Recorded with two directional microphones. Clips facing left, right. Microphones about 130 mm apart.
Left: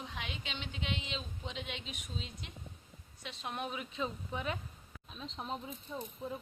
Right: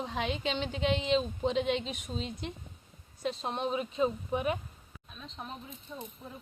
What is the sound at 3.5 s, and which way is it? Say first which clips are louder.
Speech: right 8 dB; 25° right (ahead or behind).